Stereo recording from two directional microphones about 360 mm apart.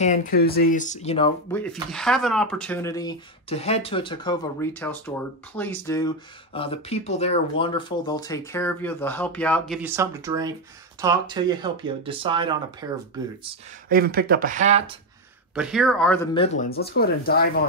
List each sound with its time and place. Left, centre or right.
0.0 s speech: left; by 13.0 s centre
13.5 s speech: right
15.5 s speech: centre
16.3 s speech: centre